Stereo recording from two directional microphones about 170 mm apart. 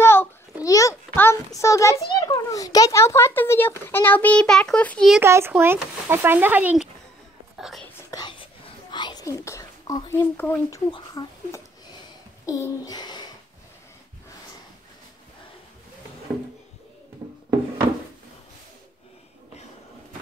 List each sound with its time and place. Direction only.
0.0 s babbling: 15° left (ahead or behind)
0.7 s a sound: 20° left (ahead or behind)
3.8 s a child's voice: 10° left (ahead or behind)
5.2 s speech: 15° right (ahead or behind)
8.1 s whispering: 25° left (ahead or behind)
8.9 s a sound: 25° left (ahead or behind)
10.3 s a child's voice: 10° left (ahead or behind)
10.9 s a sound: 25° left (ahead or behind)
12.4 s speech: 20° left (ahead or behind)